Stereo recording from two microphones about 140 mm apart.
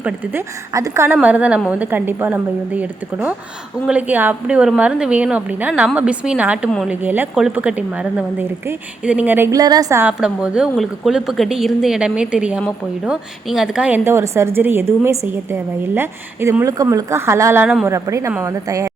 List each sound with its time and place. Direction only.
0.0 s a woman's voice: 20° right (ahead or behind)
9.5 s speech: 25° right (ahead or behind)
10.0 s a woman's voice: 5° right (ahead or behind); by 18.9 s 20° right (ahead or behind)